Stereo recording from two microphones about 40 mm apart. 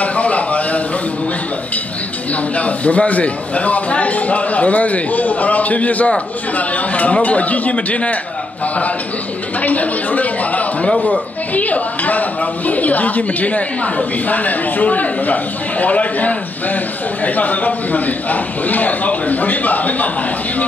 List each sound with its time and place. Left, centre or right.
0.0 s a sound: left
2.5 s speech: left
9.6 s a man's voice: left